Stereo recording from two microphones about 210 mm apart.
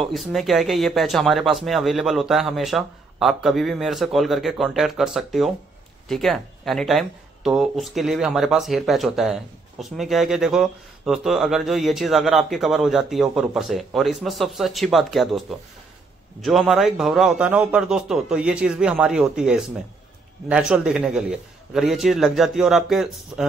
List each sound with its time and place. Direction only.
0.0 s speech: centre (ahead or behind)